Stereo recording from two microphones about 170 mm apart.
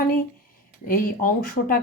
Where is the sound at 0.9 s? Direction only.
55° left (ahead or behind).